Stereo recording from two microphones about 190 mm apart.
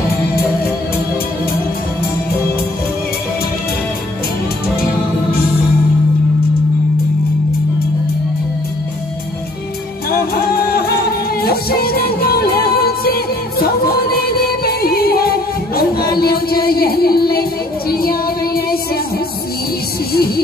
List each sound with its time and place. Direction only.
10.1 s music: 50° left (ahead or behind)
20.1 s music: 55° left (ahead or behind)